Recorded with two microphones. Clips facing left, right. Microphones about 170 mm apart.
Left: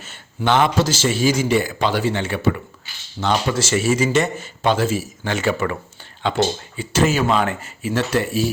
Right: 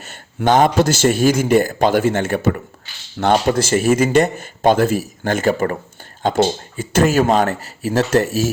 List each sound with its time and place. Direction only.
0.4 s speech: 45° right (ahead or behind)